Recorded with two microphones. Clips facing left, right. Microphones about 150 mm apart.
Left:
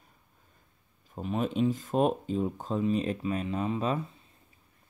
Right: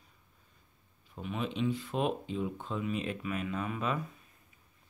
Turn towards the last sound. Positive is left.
turn(degrees=25)  # may be behind; listen again after turning